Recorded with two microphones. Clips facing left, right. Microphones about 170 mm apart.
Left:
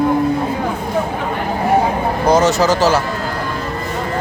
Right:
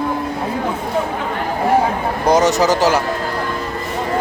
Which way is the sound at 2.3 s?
20° right (ahead or behind).